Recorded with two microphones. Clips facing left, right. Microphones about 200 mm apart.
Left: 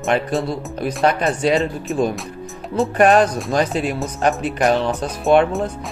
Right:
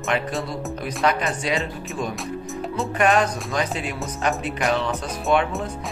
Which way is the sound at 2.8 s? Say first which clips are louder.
Left 6 dB; 35° left (ahead or behind).